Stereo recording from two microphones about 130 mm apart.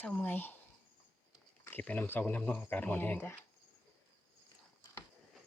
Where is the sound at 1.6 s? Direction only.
15° left (ahead or behind).